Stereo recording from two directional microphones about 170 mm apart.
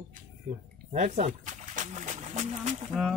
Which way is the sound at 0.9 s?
40° right (ahead or behind).